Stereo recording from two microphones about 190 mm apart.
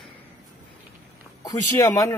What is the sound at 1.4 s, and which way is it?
Speech, 15° left (ahead or behind).